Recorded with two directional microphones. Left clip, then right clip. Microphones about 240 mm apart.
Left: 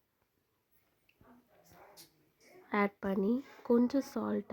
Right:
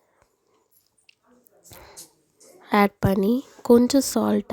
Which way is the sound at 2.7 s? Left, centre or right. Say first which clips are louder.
Right 13 dB; right.